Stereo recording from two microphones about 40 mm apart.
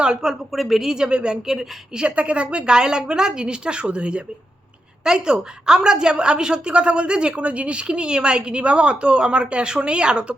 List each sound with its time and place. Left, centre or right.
0.0 s speech: centre
0.5 s speech: centre
0.9 s a woman's voice: right
2.0 s a woman's voice: right